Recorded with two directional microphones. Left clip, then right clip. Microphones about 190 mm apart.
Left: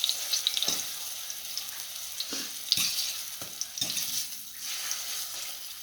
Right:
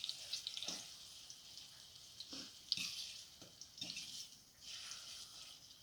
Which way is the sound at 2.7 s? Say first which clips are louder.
Left 14 dB; 30° left (ahead or behind).